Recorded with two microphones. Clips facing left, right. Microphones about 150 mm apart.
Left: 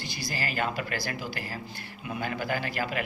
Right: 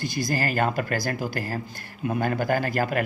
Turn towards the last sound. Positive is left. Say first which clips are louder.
# right 7 dB
turn(degrees=-45)  # may be behind; listen again after turning